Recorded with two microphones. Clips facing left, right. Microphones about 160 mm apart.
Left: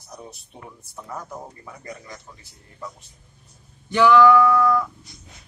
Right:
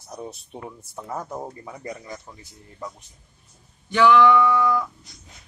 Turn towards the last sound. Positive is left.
turn(degrees=-5)  # may be behind; listen again after turning